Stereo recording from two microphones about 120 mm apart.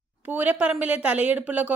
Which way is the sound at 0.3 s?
15° right (ahead or behind).